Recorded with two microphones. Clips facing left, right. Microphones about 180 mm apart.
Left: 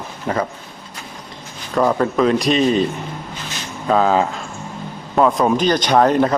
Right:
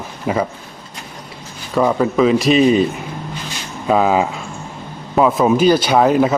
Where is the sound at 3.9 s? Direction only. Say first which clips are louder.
Right 1 dB; 10° right (ahead or behind).